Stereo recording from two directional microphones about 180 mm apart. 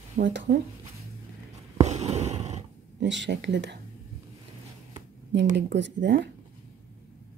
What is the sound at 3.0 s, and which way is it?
Speech, 75° right (ahead or behind).